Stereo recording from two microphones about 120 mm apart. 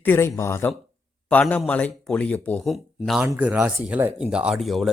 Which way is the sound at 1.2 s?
10° left (ahead or behind).